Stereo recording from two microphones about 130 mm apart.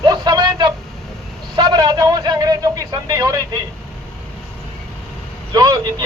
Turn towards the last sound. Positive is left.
turn(degrees=-30)  # may be behind; listen again after turning